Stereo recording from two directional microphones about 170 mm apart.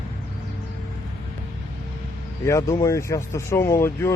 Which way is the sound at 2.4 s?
15° left (ahead or behind).